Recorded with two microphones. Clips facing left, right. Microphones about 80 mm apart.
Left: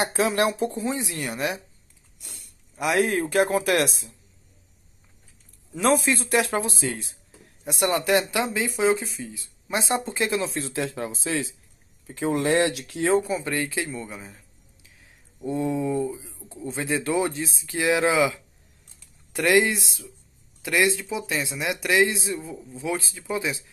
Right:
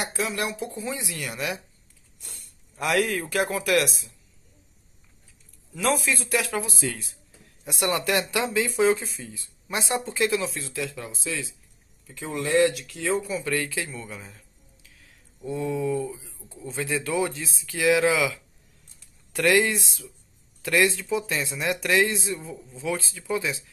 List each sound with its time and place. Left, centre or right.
0.0 s a woman's voice: left
2.1 s a sound: centre
2.8 s a woman's voice: left
5.8 s a woman's voice: left; by 9.3 s centre
9.7 s speech: left
10.5 s speech: left
13.2 s speech: left
13.9 s a sound: left
16.5 s speech: left